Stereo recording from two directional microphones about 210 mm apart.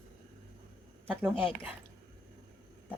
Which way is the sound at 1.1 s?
10° right (ahead or behind).